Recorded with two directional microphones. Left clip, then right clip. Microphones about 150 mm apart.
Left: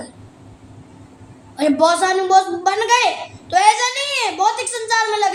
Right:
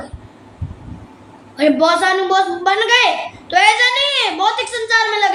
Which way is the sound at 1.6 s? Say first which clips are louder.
Right 2 dB; 50° left (ahead or behind).